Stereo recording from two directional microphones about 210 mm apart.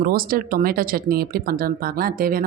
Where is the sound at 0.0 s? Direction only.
45° right (ahead or behind).